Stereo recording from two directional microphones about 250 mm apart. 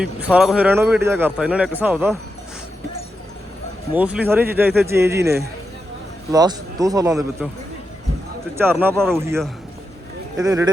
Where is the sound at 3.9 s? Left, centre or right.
Centre.